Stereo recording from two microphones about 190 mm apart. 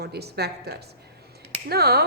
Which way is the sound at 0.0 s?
60° right (ahead or behind).